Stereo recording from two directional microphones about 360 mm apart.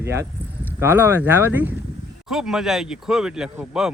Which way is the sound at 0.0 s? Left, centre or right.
Centre.